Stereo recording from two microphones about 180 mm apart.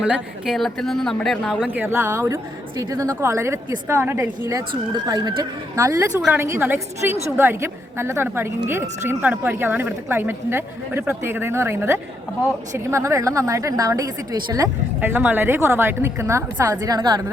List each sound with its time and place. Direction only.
0.0 s speech: centre (ahead or behind)
1.6 s a woman's voice: 10° right (ahead or behind)